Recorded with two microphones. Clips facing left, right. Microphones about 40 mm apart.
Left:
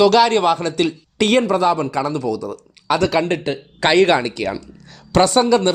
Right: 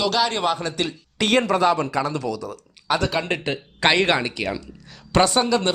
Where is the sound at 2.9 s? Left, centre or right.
Centre.